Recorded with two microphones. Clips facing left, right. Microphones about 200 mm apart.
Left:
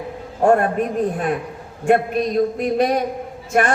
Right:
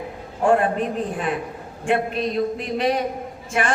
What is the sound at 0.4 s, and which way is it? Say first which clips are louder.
Speech: left 3 dB; 45° left (ahead or behind).